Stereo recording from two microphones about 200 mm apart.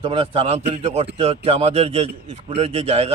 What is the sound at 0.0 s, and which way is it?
A man's voice, 30° right (ahead or behind).